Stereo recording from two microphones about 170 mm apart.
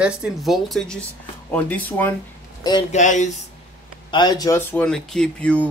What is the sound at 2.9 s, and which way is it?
Speech, 45° left (ahead or behind).